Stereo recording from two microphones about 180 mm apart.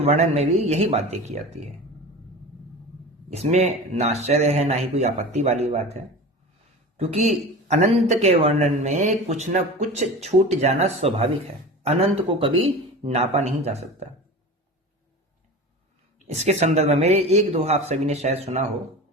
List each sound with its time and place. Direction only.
0.0 s speech: 35° right (ahead or behind)
3.3 s speech: 35° right (ahead or behind)
16.1 s speech: 40° right (ahead or behind)